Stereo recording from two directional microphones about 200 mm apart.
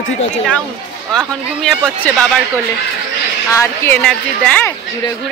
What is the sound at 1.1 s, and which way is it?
Speech, centre (ahead or behind).